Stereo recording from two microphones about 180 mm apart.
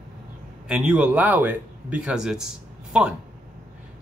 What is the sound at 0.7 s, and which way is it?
Speech, 5° right (ahead or behind).